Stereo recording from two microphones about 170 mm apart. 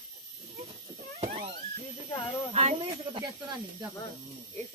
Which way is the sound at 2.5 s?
35° right (ahead or behind).